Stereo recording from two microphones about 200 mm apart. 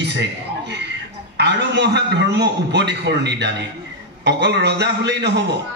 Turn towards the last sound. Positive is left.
turn(degrees=-60)  # may be behind; listen again after turning